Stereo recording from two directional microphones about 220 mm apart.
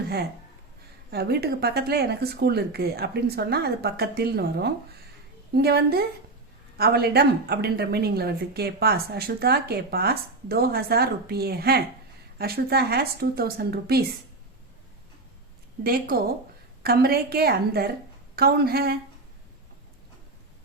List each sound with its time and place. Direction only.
1.1 s a woman's voice: 45° right (ahead or behind)
15.8 s a woman's voice: 45° right (ahead or behind)